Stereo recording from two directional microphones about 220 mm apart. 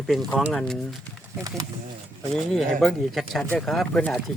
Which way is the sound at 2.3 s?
Centre (ahead or behind).